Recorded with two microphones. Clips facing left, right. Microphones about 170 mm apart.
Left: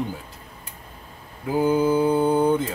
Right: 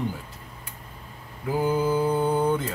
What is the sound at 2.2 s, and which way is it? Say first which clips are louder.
Speech: left 4 dB; 15° left (ahead or behind).